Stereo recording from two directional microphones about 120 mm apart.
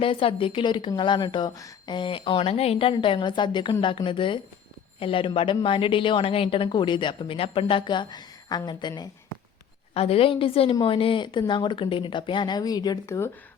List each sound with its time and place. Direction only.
0.0 s a woman's voice: 50° left (ahead or behind)
9.9 s a woman's voice: 55° left (ahead or behind); by 13.1 s 35° left (ahead or behind)